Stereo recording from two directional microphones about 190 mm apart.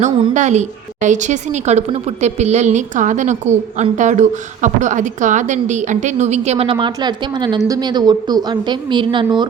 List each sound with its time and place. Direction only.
0.3 s a woman's voice: 40° right (ahead or behind)